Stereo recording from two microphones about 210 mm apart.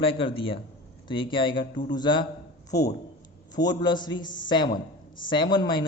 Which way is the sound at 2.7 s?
50° left (ahead or behind).